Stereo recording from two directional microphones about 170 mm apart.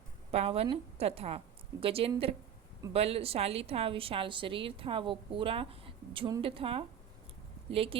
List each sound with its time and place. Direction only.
0.3 s a woman's voice: 35° right (ahead or behind)